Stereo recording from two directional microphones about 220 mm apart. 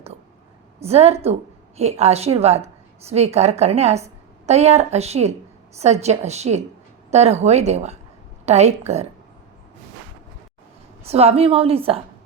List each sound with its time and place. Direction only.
0.8 s a woman's voice: 30° right (ahead or behind)
11.0 s a woman's voice: 25° right (ahead or behind)